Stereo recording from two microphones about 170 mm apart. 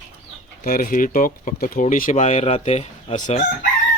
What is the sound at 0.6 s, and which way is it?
Speech, 55° left (ahead or behind).